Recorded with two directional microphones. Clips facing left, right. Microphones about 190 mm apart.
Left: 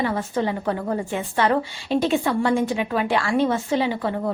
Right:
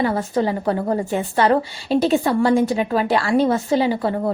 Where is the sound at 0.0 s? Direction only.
35° right (ahead or behind).